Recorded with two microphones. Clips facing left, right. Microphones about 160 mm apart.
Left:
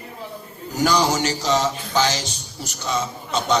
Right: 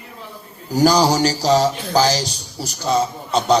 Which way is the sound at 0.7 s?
35° right (ahead or behind).